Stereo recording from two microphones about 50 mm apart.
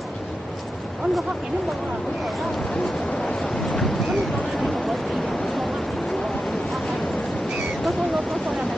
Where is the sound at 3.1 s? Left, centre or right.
Centre.